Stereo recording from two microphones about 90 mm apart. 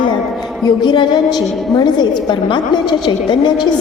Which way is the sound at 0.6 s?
60° left (ahead or behind).